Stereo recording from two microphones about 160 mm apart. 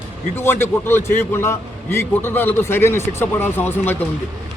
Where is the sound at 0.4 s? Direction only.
15° left (ahead or behind).